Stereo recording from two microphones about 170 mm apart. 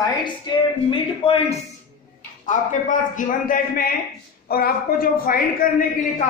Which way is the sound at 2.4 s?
50° left (ahead or behind).